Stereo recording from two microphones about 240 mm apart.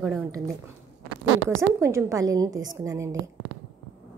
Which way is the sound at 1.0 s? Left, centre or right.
Right.